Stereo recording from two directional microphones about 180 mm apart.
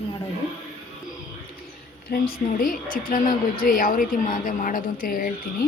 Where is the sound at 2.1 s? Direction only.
55° left (ahead or behind).